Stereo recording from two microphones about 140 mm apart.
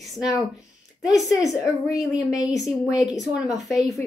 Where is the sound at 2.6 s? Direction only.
5° right (ahead or behind).